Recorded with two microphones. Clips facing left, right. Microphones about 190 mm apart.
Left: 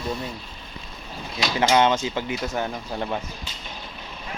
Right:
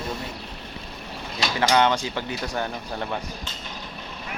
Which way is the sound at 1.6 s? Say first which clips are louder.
Left 1 dB; 20° left (ahead or behind).